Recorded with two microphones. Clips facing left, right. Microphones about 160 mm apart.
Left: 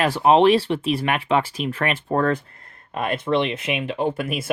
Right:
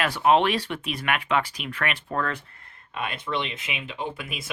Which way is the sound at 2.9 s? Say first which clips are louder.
Left 8 dB; 50° left (ahead or behind).